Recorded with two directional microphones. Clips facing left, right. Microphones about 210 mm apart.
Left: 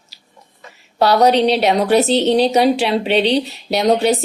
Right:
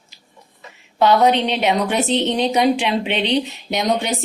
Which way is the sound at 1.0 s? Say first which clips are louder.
Left 2 dB; 40° left (ahead or behind).